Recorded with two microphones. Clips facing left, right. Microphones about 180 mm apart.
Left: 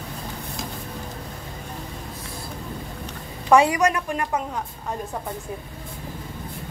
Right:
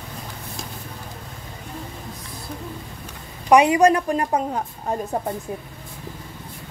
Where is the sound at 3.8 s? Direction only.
30° right (ahead or behind).